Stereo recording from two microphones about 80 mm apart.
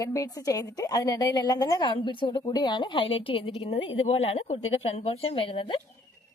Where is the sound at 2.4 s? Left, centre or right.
Left.